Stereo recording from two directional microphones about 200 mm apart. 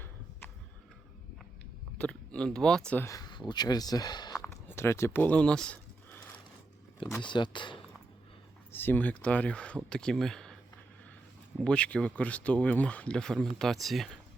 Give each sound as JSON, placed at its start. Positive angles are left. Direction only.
{"t": 2.0, "sound": "speech", "side_deg": 5}
{"t": 7.2, "sound": "speech", "side_deg": 25}
{"t": 8.7, "sound": "speech", "side_deg": 10}
{"t": 11.6, "sound": "speech", "side_deg": 5}